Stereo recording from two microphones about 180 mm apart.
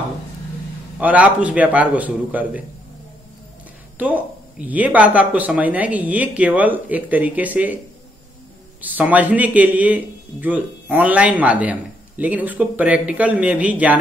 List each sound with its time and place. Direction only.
0.9 s a man's voice: 10° right (ahead or behind)
4.0 s a man's voice: 10° right (ahead or behind)
8.8 s a man's voice: 10° right (ahead or behind)